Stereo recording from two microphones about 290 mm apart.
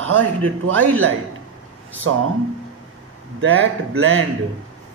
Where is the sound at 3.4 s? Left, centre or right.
Right.